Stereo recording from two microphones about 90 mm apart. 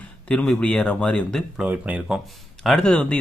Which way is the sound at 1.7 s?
15° right (ahead or behind).